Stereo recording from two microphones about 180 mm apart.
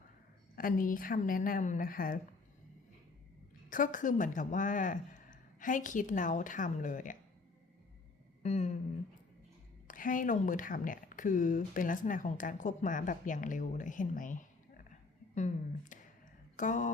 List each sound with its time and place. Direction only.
0.5 s speech: 50° left (ahead or behind)
3.7 s speech: 50° left (ahead or behind)
8.4 s a sound: 40° left (ahead or behind)
9.8 s speech: 50° left (ahead or behind)